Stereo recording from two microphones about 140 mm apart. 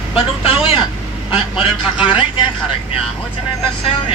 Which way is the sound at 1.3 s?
40° left (ahead or behind).